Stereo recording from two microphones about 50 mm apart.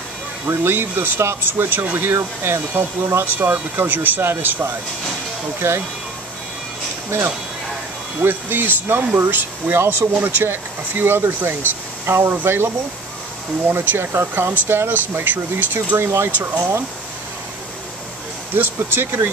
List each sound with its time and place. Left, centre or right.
0.5 s speech: right
3.3 s speech: right
3.7 s speech: right
5.6 s speech: right
7.1 s speech: right
14.2 s speech: right
18.5 s speech: right